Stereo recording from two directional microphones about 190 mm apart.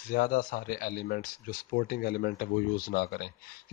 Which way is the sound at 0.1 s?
50° left (ahead or behind).